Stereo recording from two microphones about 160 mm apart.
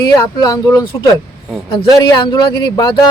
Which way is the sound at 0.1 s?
25° left (ahead or behind).